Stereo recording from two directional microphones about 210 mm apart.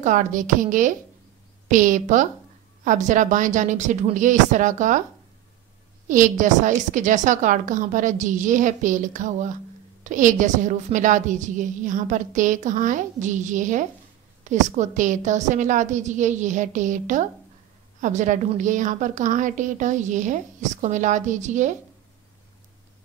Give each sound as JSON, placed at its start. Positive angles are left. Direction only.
{"t": 0.0, "sound": "a woman's voice", "side_deg": -35}
{"t": 6.0, "sound": "a woman's voice", "side_deg": -40}